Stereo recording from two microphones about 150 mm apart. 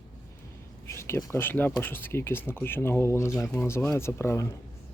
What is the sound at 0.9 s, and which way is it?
Speech, 15° left (ahead or behind).